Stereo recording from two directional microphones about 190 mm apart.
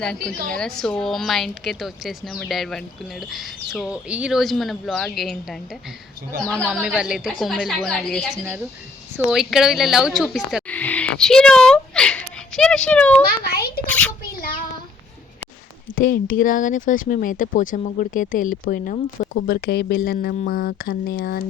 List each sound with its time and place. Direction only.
0.0 s a woman's voice: 5° left (ahead or behind)
13.2 s a child's voice: 55° left (ahead or behind)
13.8 s a child's voice: 10° left (ahead or behind)
16.0 s speech: 45° left (ahead or behind)
19.5 s speech: 55° left (ahead or behind)